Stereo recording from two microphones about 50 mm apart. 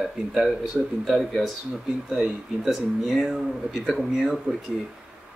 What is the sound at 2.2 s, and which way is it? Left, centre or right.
Speech, centre.